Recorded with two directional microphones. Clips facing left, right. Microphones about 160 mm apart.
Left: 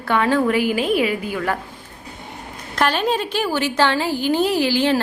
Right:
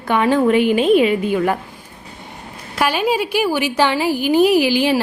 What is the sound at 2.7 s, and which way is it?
A woman's voice, 10° right (ahead or behind).